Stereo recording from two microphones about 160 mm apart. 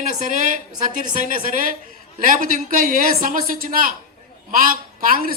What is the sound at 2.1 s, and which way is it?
A woman's voice, 60° right (ahead or behind).